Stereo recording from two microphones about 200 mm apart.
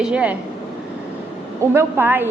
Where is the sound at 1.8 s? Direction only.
10° right (ahead or behind).